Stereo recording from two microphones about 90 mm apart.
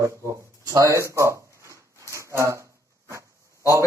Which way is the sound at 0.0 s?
35° right (ahead or behind).